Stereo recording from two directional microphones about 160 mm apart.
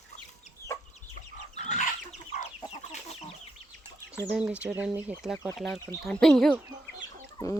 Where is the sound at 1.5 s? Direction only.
50° left (ahead or behind).